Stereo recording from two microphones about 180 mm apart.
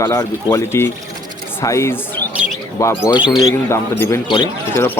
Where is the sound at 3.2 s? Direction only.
5° right (ahead or behind).